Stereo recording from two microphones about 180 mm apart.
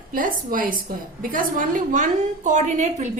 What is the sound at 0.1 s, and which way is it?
A woman's voice, 50° right (ahead or behind).